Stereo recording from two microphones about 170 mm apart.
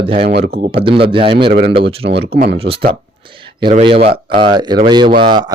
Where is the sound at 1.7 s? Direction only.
35° right (ahead or behind).